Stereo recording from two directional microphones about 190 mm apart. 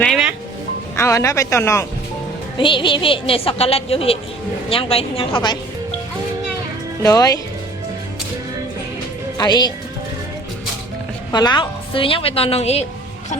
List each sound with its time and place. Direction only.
0.0 s music: centre (ahead or behind)
0.9 s speech: 15° left (ahead or behind)
2.6 s a woman's voice: 25° left (ahead or behind)
7.0 s a woman's voice: 20° left (ahead or behind)
9.4 s a woman's voice: 20° left (ahead or behind)
11.3 s a woman's voice: 20° left (ahead or behind)